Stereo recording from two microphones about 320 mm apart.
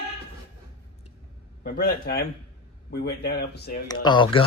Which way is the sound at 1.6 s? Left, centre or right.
Left.